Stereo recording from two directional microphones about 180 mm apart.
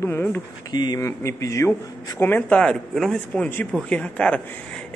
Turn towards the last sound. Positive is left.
turn(degrees=5)  # may be behind; listen again after turning